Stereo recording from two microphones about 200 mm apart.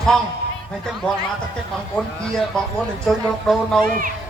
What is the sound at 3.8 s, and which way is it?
Speech, 45° right (ahead or behind).